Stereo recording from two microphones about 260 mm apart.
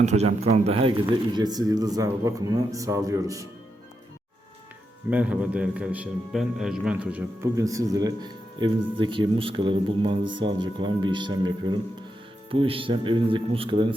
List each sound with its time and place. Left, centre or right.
0.0 s speech: right
5.1 s a man's voice: centre